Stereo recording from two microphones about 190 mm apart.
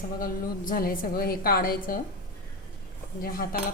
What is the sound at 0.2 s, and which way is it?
A woman's voice, 45° left (ahead or behind).